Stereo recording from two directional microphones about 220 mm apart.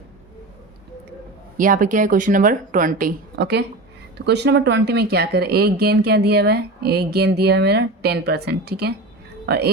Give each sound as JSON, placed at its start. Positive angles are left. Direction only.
{"t": 1.5, "sound": "speech", "side_deg": -35}